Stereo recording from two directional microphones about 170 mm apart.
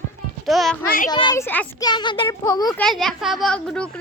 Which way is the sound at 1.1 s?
25° left (ahead or behind).